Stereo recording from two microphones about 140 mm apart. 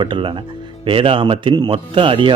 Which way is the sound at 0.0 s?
35° right (ahead or behind).